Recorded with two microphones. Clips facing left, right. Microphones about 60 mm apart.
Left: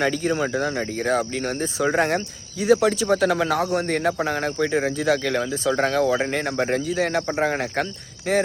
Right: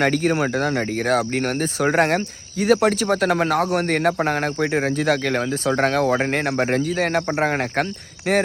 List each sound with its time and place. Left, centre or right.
0.0 s speech: right
7.2 s a man's voice: right
7.4 s speech: right